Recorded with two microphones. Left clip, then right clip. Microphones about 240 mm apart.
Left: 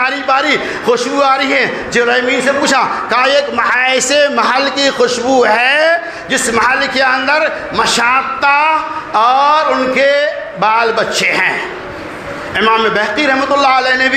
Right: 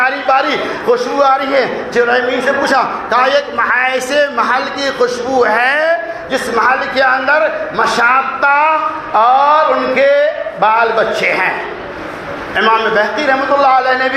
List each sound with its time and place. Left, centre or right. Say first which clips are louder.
0.0 s a man's voice: right 1 dB; left
9.1 s a sound: even; left
12.5 s a man's voice: even; left